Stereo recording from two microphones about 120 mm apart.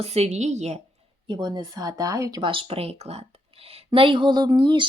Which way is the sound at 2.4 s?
45° right (ahead or behind).